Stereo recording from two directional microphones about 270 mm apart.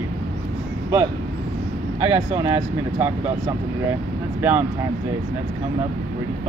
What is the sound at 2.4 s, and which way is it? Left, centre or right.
Speech, centre.